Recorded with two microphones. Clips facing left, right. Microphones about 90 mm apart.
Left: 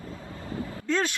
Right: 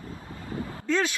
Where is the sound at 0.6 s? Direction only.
30° right (ahead or behind).